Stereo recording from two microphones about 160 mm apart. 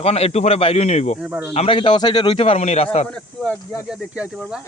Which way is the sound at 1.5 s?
35° left (ahead or behind).